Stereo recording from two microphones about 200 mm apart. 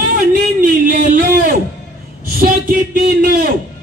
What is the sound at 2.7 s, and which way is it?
Speech, 50° right (ahead or behind).